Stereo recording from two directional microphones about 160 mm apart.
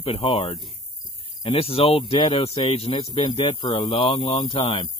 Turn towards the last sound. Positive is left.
turn(degrees=30)  # may be behind; listen again after turning